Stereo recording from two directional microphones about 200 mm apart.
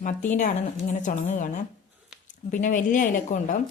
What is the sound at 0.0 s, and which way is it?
Speech, 40° left (ahead or behind).